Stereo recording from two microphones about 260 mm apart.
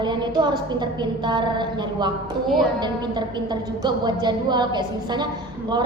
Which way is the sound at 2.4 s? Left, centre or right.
Centre.